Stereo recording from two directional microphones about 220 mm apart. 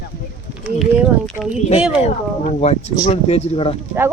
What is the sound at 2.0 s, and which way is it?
Speech, 30° left (ahead or behind).